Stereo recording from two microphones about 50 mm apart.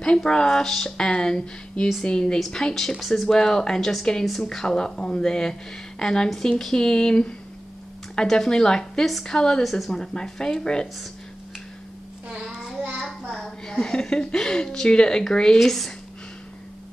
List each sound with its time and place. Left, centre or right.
0.0 s speech: centre
9.6 s speech: centre
12.4 s child singing: centre
13.3 s a sound: centre
15.6 s speech: centre